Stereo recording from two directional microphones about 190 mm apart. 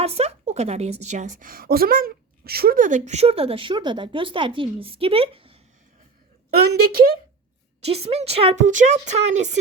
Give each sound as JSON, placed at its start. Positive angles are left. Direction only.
{"t": 0.0, "sound": "a woman's voice", "side_deg": -35}
{"t": 6.5, "sound": "a woman's voice", "side_deg": -55}
{"t": 7.9, "sound": "a woman's voice", "side_deg": -30}